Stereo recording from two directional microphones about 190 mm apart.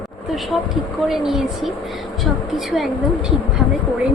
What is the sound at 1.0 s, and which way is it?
Speech, centre (ahead or behind).